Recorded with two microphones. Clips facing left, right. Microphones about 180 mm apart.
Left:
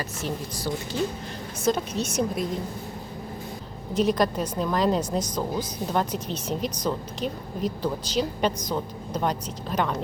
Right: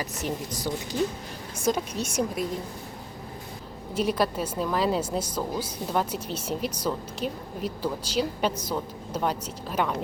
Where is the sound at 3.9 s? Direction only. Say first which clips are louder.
Left 3 dB; 10° right (ahead or behind).